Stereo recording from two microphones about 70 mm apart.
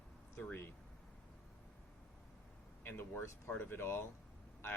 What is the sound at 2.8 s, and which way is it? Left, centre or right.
Speech, left.